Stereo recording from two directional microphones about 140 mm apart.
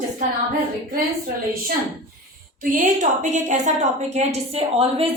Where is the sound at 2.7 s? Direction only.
70° right (ahead or behind).